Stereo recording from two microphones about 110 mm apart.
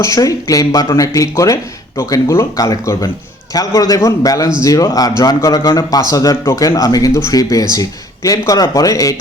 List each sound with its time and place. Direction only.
0.0 s speech: 30° left (ahead or behind)